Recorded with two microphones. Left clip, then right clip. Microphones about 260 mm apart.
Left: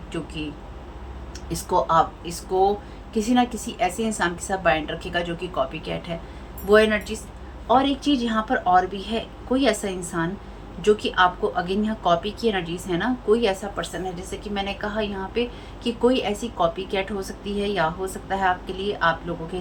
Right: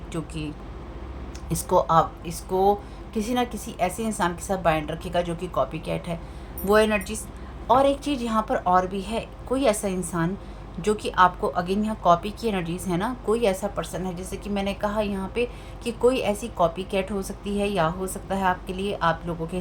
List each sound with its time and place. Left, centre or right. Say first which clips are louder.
1.5 s a woman's voice: even; right